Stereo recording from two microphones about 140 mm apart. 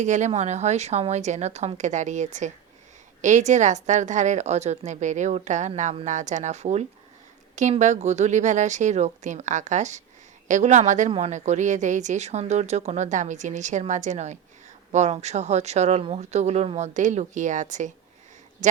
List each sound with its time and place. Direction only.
0.0 s speech: 60° right (ahead or behind)